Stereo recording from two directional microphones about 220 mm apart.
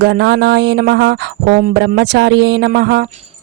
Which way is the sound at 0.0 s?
50° right (ahead or behind).